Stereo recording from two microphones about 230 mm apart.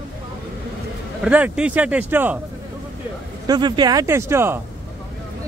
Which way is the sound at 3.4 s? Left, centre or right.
Centre.